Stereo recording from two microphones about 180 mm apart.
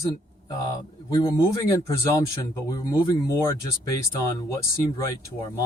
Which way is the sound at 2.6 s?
20° left (ahead or behind).